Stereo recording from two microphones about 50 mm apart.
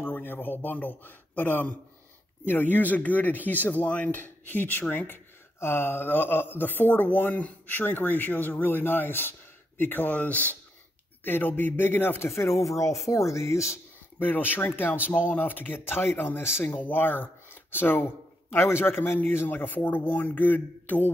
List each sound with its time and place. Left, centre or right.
0.0 s a man's voice: left
10.0 s speech: left
12.5 s speech: left
14.2 s speech: left
16.6 s speech: left
16.9 s speech: left
18.6 s speech: left
19.4 s speech: left